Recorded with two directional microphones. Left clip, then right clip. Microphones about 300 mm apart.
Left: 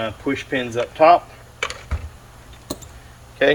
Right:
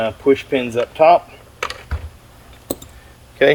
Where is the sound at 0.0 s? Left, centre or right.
Right.